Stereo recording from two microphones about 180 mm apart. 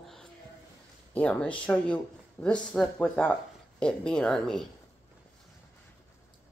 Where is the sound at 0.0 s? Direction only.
Centre (ahead or behind).